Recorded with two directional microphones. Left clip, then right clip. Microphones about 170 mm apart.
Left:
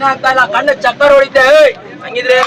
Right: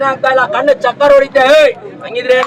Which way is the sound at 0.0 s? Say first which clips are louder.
Left 1 dB; 55° right (ahead or behind).